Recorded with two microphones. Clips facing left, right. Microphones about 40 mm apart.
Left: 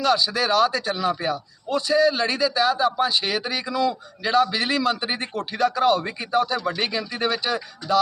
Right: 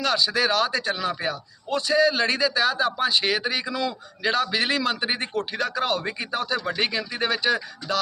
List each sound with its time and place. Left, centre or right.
0.0 s a man's voice: right